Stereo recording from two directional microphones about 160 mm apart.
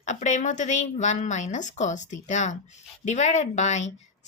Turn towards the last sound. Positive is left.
turn(degrees=45)  # may be behind; listen again after turning